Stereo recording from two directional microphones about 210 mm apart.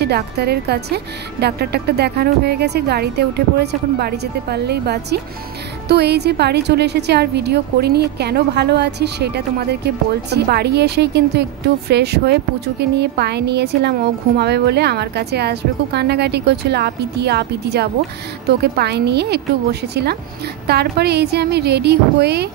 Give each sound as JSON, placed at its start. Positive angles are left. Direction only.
{"t": 0.0, "sound": "a woman's voice", "side_deg": -50}